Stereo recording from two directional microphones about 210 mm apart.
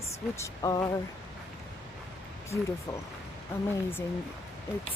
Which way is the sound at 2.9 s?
20° left (ahead or behind).